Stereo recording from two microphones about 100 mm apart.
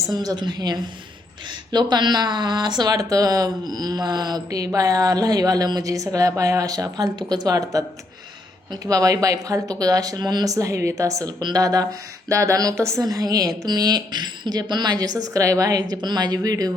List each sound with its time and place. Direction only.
0.0 s speech: 40° right (ahead or behind)